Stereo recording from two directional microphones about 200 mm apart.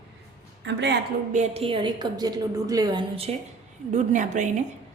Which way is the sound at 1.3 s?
35° right (ahead or behind).